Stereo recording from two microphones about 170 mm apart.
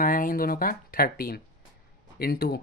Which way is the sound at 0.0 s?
55° left (ahead or behind).